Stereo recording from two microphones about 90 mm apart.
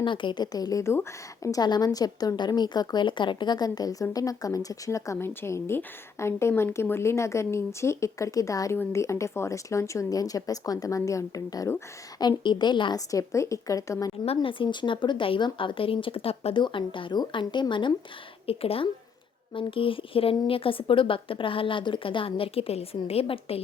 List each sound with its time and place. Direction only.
0.0 s a woman's voice: 65° left (ahead or behind); by 1.6 s 40° left (ahead or behind)
1.6 s a woman's voice: 50° left (ahead or behind)
5.1 s a woman's voice: 25° left (ahead or behind)
12.4 s speech: 60° left (ahead or behind)
13.1 s speech: 35° left (ahead or behind)
14.4 s speech: 65° left (ahead or behind)
17.2 s speech: 60° left (ahead or behind)
18.4 s a woman's voice: 90° left